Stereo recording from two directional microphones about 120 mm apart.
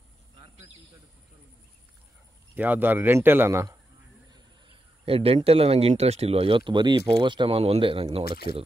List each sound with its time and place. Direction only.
2.5 s a man's voice: 15° right (ahead or behind)
4.3 s speech: 45° right (ahead or behind)